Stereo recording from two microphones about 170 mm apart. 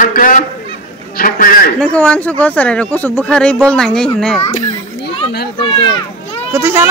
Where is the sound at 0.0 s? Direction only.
50° left (ahead or behind).